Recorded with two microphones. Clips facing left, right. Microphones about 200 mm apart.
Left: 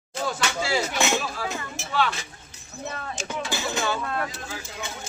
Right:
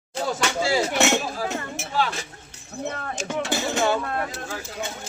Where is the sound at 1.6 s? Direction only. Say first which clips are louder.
Right 3 dB; 65° right (ahead or behind).